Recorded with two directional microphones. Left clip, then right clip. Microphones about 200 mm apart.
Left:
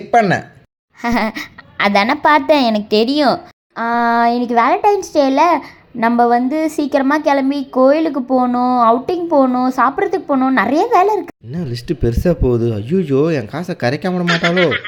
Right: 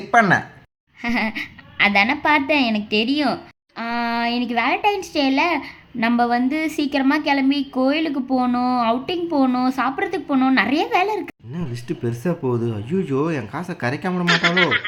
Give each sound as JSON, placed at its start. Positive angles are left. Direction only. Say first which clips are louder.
{"t": 0.1, "sound": "a woman's voice", "louder": "left 2 dB", "side_deg": 20}
{"t": 3.3, "sound": "a woman's voice", "louder": "left 8 dB", "side_deg": 5}
{"t": 7.6, "sound": "speech", "louder": "left 9 dB", "side_deg": 20}
{"t": 7.9, "sound": "a woman's voice", "louder": "left 8 dB", "side_deg": 0}
{"t": 11.5, "sound": "speech", "louder": "left 7 dB", "side_deg": 30}
{"t": 14.3, "sound": "a woman's voice", "louder": "left 2 dB", "side_deg": 0}